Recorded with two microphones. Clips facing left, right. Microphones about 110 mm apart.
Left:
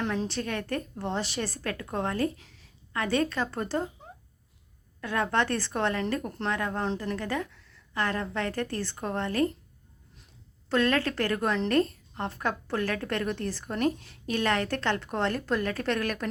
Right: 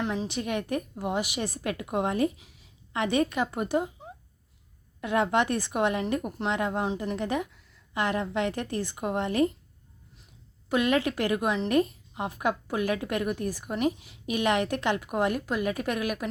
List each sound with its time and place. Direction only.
0.0 s a woman's voice: 5° right (ahead or behind)
0.3 s a woman's voice: 15° right (ahead or behind)
4.9 s a woman's voice: 20° right (ahead or behind)
10.7 s a woman's voice: 15° right (ahead or behind)